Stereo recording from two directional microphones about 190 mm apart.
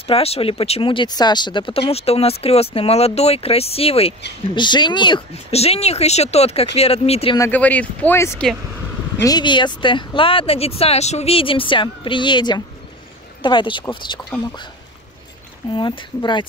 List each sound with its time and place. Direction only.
0.0 s speech: 30° left (ahead or behind)
7.3 s speech: 10° left (ahead or behind)
9.2 s speech: 20° left (ahead or behind)
15.7 s speech: 25° left (ahead or behind)